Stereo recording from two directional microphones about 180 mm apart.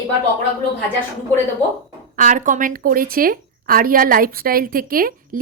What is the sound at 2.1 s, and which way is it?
A woman's voice, 45° right (ahead or behind).